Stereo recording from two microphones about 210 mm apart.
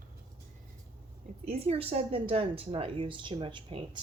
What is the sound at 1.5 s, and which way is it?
A woman's voice, 30° right (ahead or behind).